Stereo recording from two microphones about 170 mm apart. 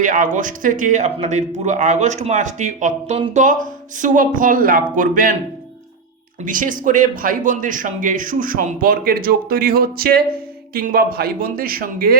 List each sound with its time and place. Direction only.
0.0 s speech: 50° right (ahead or behind)
6.4 s a man's voice: 50° right (ahead or behind)